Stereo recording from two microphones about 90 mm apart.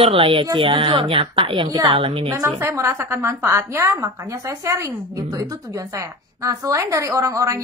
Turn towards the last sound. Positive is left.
turn(degrees=-40)  # may be behind; listen again after turning